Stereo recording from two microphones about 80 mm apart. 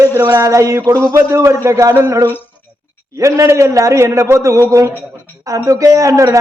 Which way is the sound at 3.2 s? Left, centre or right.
Right.